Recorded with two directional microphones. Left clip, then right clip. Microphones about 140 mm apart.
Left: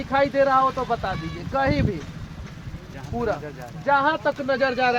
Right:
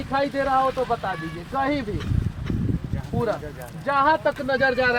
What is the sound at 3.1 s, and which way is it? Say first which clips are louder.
Speech: even; centre (ahead or behind).